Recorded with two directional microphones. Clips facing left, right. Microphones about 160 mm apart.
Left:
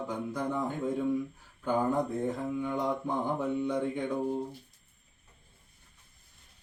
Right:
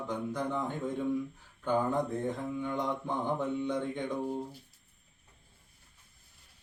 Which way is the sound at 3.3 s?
10° left (ahead or behind).